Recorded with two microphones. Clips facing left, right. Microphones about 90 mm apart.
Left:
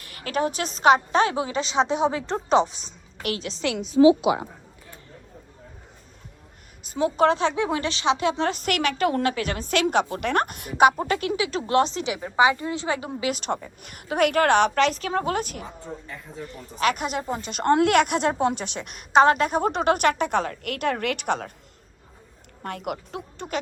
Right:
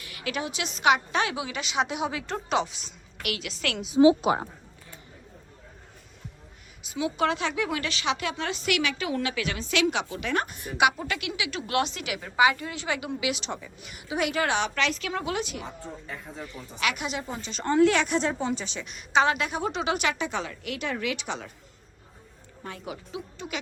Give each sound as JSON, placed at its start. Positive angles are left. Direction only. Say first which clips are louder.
{"t": 0.0, "sound": "speech", "louder": "left 6 dB", "side_deg": 40}
{"t": 4.0, "sound": "a woman's voice", "louder": "left 3 dB", "side_deg": -40}
{"t": 6.8, "sound": "speech", "louder": "left 6 dB", "side_deg": 40}
{"t": 8.4, "sound": "speech", "louder": "left 3 dB", "side_deg": 45}
{"t": 10.8, "sound": "speech", "louder": "left 6 dB", "side_deg": 40}
{"t": 22.6, "sound": "speech", "louder": "left 7 dB", "side_deg": 65}